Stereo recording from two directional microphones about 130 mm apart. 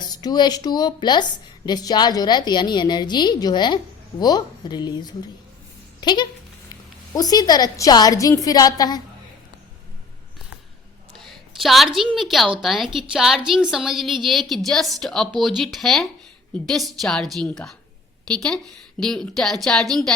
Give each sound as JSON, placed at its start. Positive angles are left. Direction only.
{"t": 0.0, "sound": "a woman's voice", "side_deg": 30}
{"t": 11.2, "sound": "a woman's voice", "side_deg": 0}